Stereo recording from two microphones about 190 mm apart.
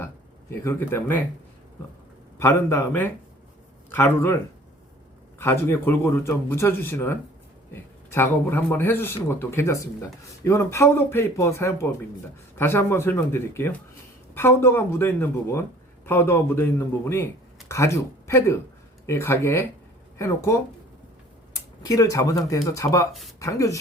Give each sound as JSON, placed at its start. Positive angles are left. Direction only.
{"t": 0.5, "sound": "speech", "side_deg": 10}
{"t": 2.4, "sound": "speech", "side_deg": 10}
{"t": 5.4, "sound": "speech", "side_deg": 10}
{"t": 21.8, "sound": "speech", "side_deg": 20}